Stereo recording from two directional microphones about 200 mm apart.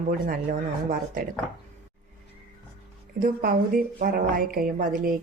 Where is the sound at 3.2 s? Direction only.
45° right (ahead or behind).